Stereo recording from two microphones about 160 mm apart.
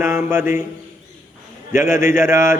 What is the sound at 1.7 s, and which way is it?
Speech, 15° right (ahead or behind).